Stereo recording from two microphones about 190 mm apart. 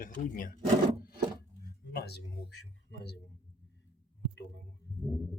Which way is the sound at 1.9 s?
55° left (ahead or behind).